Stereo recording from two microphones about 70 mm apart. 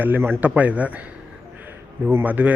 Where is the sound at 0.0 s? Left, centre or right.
Right.